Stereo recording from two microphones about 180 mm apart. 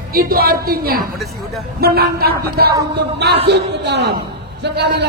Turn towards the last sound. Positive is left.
turn(degrees=-70)  # may be behind; listen again after turning